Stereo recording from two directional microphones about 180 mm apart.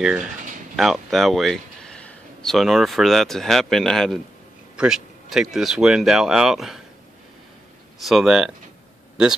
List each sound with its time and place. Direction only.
0.7 s speech: centre (ahead or behind)
8.0 s speech: centre (ahead or behind)